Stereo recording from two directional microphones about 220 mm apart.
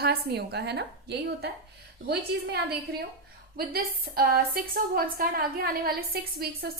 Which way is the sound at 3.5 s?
45° right (ahead or behind).